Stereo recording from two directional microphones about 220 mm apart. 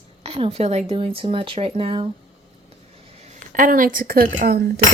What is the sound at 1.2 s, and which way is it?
Speech, 25° right (ahead or behind).